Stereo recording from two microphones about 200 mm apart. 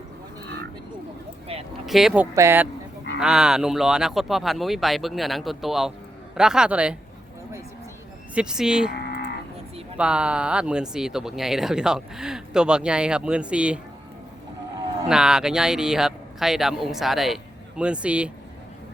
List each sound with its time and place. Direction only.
1.9 s speech: centre (ahead or behind)
2.3 s speech: 15° right (ahead or behind)
8.4 s speech: 5° right (ahead or behind)
8.9 s cattle: 55° left (ahead or behind)
10.0 s speech: 5° right (ahead or behind)
15.0 s speech: 5° right (ahead or behind)